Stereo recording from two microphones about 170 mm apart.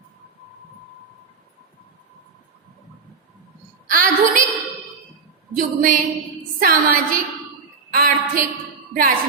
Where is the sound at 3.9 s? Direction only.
55° right (ahead or behind).